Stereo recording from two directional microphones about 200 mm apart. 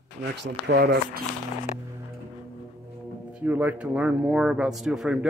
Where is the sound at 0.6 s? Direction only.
55° right (ahead or behind).